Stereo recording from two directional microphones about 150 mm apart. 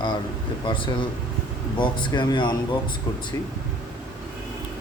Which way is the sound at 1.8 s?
30° left (ahead or behind).